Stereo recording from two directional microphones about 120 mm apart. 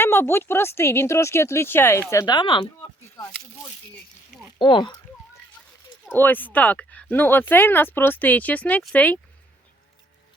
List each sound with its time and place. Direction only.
0.0 s speech: 20° left (ahead or behind)
2.2 s speech: 40° left (ahead or behind)
4.5 s speech: 40° left (ahead or behind)
6.1 s speech: 15° left (ahead or behind)